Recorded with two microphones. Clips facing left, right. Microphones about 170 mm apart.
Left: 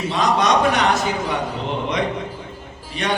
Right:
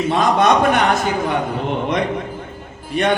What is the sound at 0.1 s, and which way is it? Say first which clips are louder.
A man's voice: right 3 dB; 55° right (ahead or behind).